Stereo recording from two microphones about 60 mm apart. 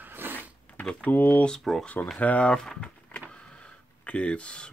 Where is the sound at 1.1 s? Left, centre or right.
Left.